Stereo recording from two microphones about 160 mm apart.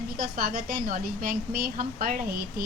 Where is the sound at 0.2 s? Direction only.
65° right (ahead or behind).